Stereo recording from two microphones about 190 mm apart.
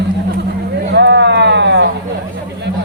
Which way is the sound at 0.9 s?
65° right (ahead or behind).